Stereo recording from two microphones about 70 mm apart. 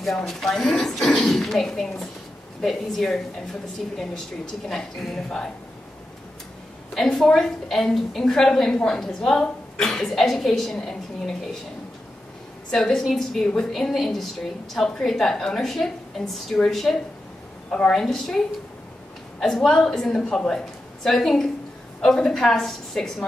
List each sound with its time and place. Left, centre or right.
0.0 s a woman's voice: centre
4.6 s a woman's voice: centre
6.9 s a woman's voice: centre
12.7 s a woman's voice: centre
18.0 s a woman's voice: centre
19.4 s a woman's voice: centre